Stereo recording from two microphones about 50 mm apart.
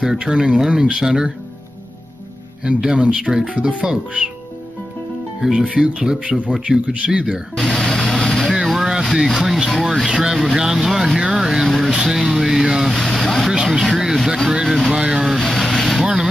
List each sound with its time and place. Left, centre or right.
0.0 s speech: centre
2.6 s speech: centre
5.4 s speech: centre
7.5 s vehicle: centre
8.6 s a sound: centre
9.1 s speech: centre
12.9 s vehicle: centre
13.7 s a sound: centre
15.0 s vehicle: centre